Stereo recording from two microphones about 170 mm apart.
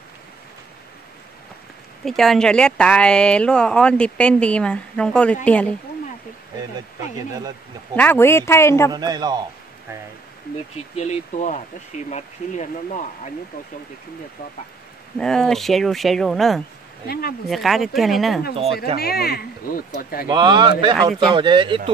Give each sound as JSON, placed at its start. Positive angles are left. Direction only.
{"t": 2.0, "sound": "speech", "side_deg": 0}
{"t": 7.9, "sound": "speech", "side_deg": 10}
{"t": 8.9, "sound": "speech", "side_deg": -25}
{"t": 11.0, "sound": "speech", "side_deg": 45}
{"t": 15.1, "sound": "speech", "side_deg": 5}
{"t": 17.1, "sound": "speech", "side_deg": 65}
{"t": 17.5, "sound": "speech", "side_deg": 0}
{"t": 18.9, "sound": "speech", "side_deg": 65}
{"t": 20.2, "sound": "speech", "side_deg": -30}